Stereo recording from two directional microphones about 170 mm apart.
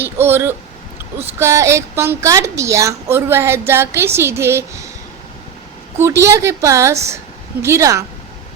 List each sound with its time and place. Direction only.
0.0 s a woman's voice: 15° right (ahead or behind)
6.0 s a woman's voice: 20° right (ahead or behind)